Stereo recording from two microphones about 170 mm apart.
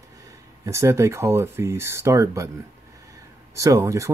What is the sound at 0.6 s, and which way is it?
Speech, 15° right (ahead or behind).